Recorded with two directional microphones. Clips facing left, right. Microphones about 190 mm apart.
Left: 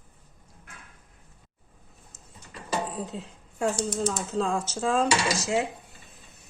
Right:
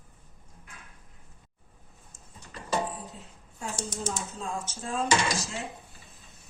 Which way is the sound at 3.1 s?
90° left.